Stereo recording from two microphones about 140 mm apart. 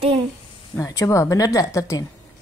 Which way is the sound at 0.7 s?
20° left (ahead or behind).